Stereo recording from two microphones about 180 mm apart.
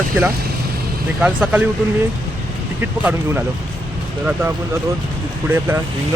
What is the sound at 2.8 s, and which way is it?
Speech, 10° right (ahead or behind).